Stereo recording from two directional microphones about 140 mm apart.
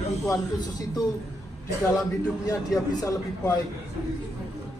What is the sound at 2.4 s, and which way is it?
Speech, 25° left (ahead or behind).